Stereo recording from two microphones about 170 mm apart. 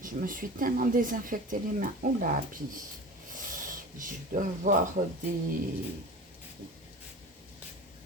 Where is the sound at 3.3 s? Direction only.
55° right (ahead or behind).